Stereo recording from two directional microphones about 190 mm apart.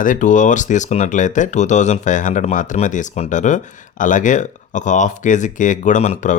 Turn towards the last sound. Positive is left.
turn(degrees=40)  # may be behind; listen again after turning